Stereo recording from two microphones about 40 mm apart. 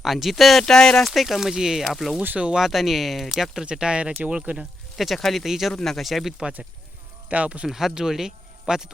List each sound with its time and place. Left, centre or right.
0.0 s speech: centre
0.6 s speech: centre
1.0 s speech: centre
1.9 s speech: centre
3.7 s speech: right
4.9 s speech: centre
5.8 s speech: centre
6.1 s speech: centre
7.3 s speech: right
7.7 s speech: centre